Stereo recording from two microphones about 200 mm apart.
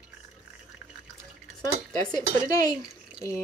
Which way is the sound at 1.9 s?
20° left (ahead or behind).